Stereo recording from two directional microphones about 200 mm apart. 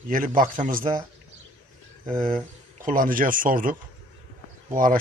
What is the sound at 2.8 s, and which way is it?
Speech, 45° right (ahead or behind).